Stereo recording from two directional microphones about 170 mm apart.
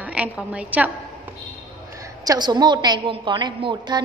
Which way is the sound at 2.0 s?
25° right (ahead or behind).